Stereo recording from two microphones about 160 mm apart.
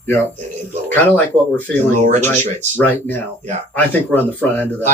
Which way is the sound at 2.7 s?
10° left (ahead or behind).